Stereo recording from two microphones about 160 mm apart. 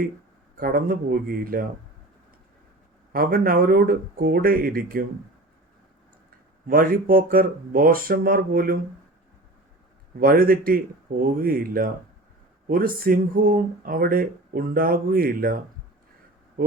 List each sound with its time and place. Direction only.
0.5 s speech: 65° right (ahead or behind)
3.1 s speech: 65° right (ahead or behind)
6.7 s speech: 60° right (ahead or behind)
10.2 s speech: 65° right (ahead or behind)